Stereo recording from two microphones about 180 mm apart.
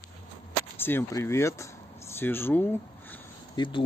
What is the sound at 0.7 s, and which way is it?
Speech, 10° left (ahead or behind).